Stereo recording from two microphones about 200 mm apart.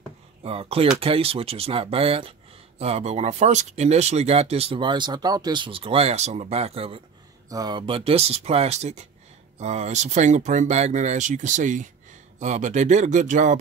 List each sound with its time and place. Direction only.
0.4 s speech: 30° right (ahead or behind)
7.4 s speech: 20° right (ahead or behind); by 13.6 s 40° right (ahead or behind)